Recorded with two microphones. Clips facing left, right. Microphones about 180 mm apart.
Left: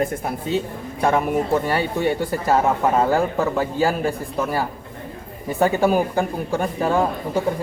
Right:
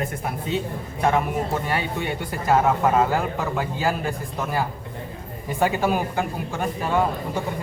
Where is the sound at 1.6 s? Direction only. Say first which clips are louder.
Left 5 dB; 40° left (ahead or behind).